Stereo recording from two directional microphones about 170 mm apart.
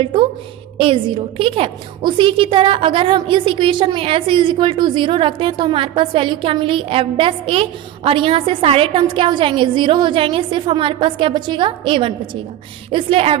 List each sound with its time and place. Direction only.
0.0 s a woman's voice: 30° right (ahead or behind)